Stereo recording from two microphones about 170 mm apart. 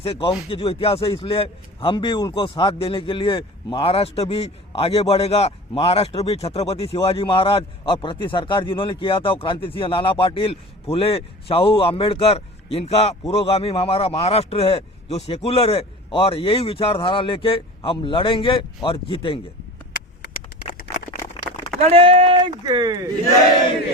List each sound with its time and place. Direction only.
0.0 s speech: 35° left (ahead or behind)
21.8 s speech: 35° right (ahead or behind)